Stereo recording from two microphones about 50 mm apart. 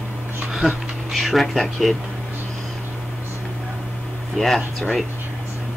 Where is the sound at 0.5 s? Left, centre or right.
Centre.